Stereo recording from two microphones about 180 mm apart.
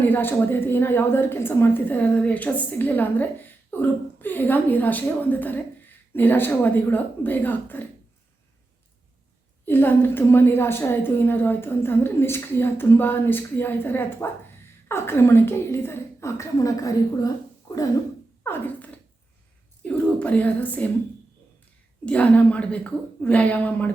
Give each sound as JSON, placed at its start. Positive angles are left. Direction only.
{"t": 0.0, "sound": "a woman's voice", "side_deg": 10}
{"t": 9.6, "sound": "a woman's voice", "side_deg": 10}
{"t": 18.4, "sound": "a sound", "side_deg": 10}
{"t": 19.8, "sound": "speech", "side_deg": 5}
{"t": 22.0, "sound": "a woman's voice", "side_deg": 5}